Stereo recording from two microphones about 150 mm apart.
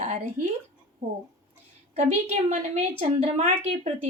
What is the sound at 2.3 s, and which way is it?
Speech, 50° right (ahead or behind).